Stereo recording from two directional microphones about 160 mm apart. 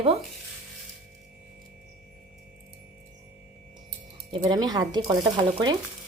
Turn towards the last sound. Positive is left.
turn(degrees=-25)  # may be behind; listen again after turning